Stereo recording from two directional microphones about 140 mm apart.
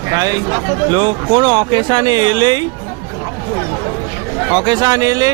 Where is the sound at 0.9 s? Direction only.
30° right (ahead or behind).